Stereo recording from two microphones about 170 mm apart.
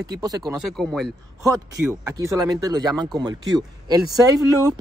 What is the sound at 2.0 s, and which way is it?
Speech, 20° right (ahead or behind).